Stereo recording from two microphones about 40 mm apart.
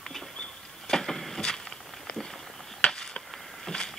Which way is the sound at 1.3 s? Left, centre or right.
Centre.